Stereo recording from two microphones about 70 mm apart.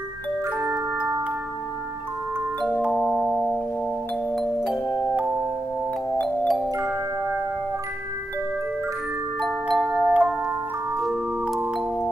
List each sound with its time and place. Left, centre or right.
0.6 s music: right
2.9 s music: centre
4.8 s music: left
6.2 s music: centre
6.8 s music: right
9.4 s glockenspiel: centre
9.9 s music: centre